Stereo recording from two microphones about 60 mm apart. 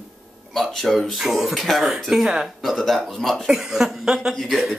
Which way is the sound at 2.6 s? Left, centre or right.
Centre.